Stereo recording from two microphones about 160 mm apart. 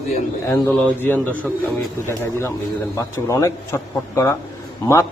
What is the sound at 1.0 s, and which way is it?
Speech, 10° left (ahead or behind).